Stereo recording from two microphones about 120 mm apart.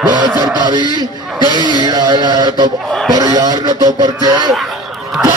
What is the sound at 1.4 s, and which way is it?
Speech, 35° right (ahead or behind).